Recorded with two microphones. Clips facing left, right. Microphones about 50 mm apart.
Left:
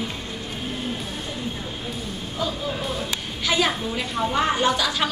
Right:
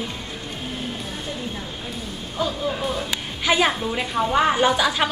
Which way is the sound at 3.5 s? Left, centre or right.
Centre.